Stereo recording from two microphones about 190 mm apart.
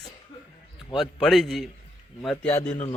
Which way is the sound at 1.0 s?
Centre (ahead or behind).